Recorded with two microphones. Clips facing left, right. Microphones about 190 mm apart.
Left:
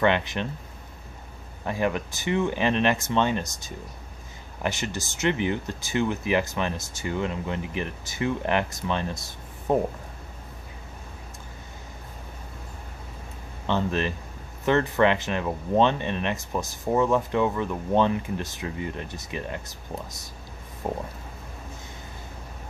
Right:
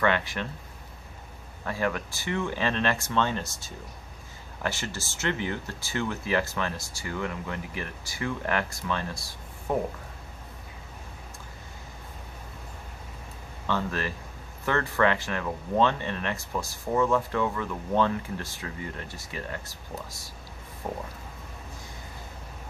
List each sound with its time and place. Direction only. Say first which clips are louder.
0.0 s speech: left 3 dB; 20° left (ahead or behind)
1.6 s speech: left 3 dB; 20° left (ahead or behind)
13.7 s speech: left 4 dB; 20° left (ahead or behind)